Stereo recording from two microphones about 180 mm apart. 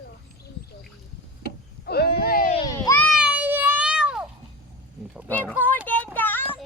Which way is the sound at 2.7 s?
20° left (ahead or behind).